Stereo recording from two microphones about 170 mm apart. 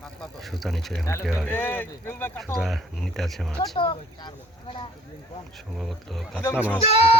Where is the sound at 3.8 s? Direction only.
30° left (ahead or behind).